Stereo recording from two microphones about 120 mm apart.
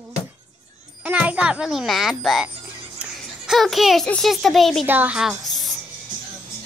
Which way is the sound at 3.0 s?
Centre (ahead or behind).